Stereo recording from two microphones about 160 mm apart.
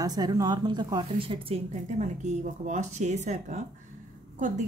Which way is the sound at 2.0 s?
50° right (ahead or behind).